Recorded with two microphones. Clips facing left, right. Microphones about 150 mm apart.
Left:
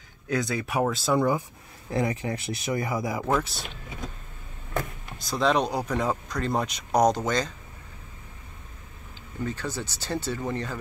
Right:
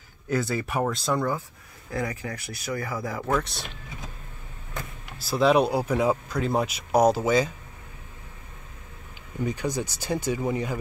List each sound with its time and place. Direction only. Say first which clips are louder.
0.3 s speech: right 1 dB; 5° right (ahead or behind)
1.9 s speech: left 4 dB; 25° left (ahead or behind); by 3.7 s centre (ahead or behind)
5.2 s speech: right 4 dB; 5° right (ahead or behind)
9.4 s speech: right 4 dB; 15° right (ahead or behind)